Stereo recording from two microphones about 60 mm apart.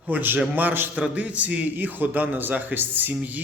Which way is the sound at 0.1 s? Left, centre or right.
Right.